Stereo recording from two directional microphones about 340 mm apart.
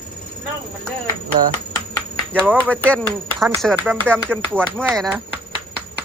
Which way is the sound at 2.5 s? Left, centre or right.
Centre.